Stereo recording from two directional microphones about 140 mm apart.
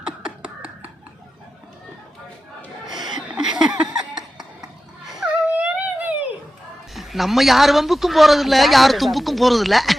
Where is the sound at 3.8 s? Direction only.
5° right (ahead or behind).